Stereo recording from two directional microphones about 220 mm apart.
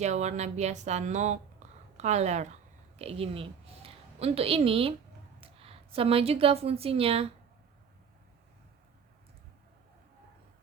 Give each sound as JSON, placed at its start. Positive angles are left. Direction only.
{"t": 0.0, "sound": "a woman's voice", "side_deg": -30}